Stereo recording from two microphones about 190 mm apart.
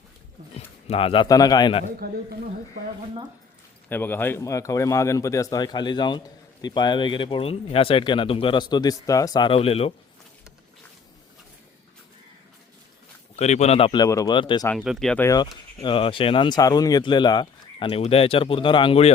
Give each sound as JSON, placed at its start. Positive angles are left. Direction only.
{"t": 0.5, "sound": "speech", "side_deg": 30}
{"t": 2.0, "sound": "a man's voice", "side_deg": -55}
{"t": 3.8, "sound": "a man's voice", "side_deg": 10}
{"t": 13.3, "sound": "a man's voice", "side_deg": 35}
{"t": 14.8, "sound": "speech", "side_deg": 0}
{"t": 15.3, "sound": "a man's voice", "side_deg": 25}